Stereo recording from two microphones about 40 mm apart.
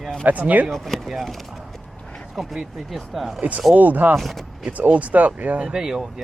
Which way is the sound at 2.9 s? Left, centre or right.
Centre.